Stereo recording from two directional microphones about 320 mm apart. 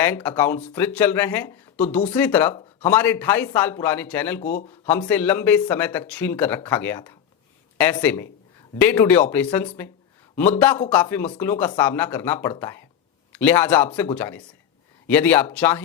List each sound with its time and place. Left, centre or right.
0.0 s speech: centre
4.4 s speech: left
4.9 s speech: centre